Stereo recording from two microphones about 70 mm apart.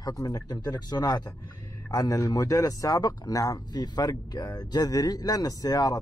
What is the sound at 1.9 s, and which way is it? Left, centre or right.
Speech, left.